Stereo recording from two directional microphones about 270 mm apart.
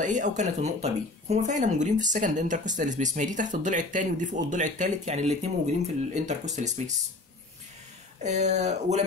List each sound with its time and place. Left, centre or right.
0.0 s speech: right
8.2 s speech: right